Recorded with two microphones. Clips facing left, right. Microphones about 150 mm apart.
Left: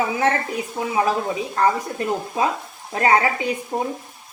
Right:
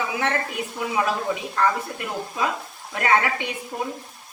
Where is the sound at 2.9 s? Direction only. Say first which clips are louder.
Left 3 dB; 30° left (ahead or behind).